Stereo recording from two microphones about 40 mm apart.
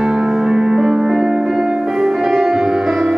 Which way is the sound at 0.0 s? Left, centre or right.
Centre.